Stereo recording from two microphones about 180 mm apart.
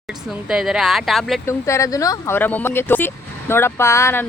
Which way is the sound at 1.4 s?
15° left (ahead or behind).